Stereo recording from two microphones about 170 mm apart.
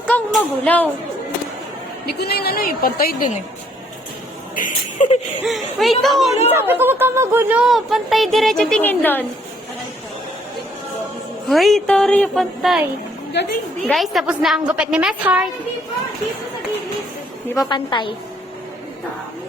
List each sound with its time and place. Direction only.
0.1 s music: 5° left (ahead or behind)
2.0 s a woman's voice: 70° left (ahead or behind)
4.5 s a sound: 50° left (ahead or behind)
5.5 s speech: centre (ahead or behind)
6.5 s speech: 10° right (ahead or behind); by 9.2 s 10° left (ahead or behind)
11.4 s speech: centre (ahead or behind)
13.8 s speech: centre (ahead or behind)
17.7 s a woman's voice: 30° left (ahead or behind)